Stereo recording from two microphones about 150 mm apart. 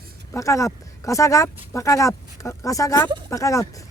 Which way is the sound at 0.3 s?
20° left (ahead or behind).